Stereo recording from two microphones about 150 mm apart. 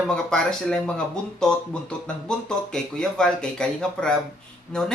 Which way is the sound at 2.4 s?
5° left (ahead or behind).